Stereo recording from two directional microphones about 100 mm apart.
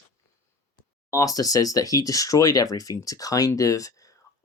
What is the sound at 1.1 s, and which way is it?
Speech, 35° left (ahead or behind).